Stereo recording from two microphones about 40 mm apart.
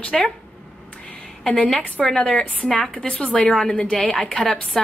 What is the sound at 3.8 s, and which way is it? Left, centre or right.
Speech, left.